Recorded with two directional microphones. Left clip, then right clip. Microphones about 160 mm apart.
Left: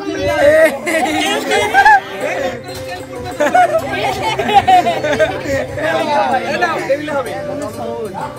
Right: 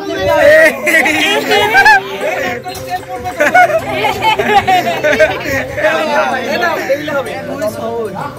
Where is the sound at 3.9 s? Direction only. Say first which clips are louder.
Right 5 dB; 80° left.